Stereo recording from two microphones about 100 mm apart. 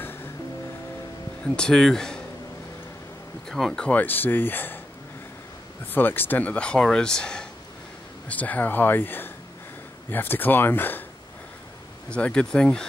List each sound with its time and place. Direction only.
1.4 s speech: 5° left (ahead or behind)
3.4 s speech: 5° left (ahead or behind); by 4.7 s 20° left (ahead or behind)
5.9 s speech: 20° left (ahead or behind)
12.1 s speech: 10° left (ahead or behind)